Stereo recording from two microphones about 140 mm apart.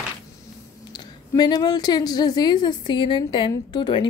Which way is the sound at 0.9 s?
30° left (ahead or behind).